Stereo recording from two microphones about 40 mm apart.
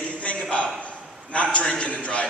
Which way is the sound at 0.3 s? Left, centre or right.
Left.